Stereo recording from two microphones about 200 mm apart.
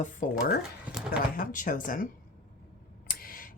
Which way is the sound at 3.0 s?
45° left (ahead or behind).